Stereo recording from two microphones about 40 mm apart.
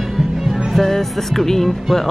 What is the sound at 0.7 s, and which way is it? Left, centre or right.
Music, centre.